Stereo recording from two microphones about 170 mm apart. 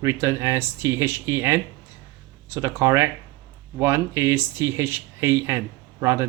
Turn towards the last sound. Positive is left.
turn(degrees=-15)  # may be behind; listen again after turning